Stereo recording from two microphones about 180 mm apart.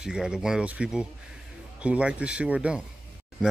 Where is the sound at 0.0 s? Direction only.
5° right (ahead or behind).